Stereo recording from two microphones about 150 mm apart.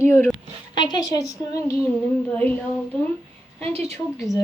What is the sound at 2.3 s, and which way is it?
Speech, 10° left (ahead or behind).